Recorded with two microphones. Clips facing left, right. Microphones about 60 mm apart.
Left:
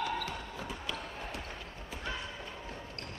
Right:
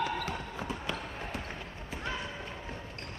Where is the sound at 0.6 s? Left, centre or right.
Right.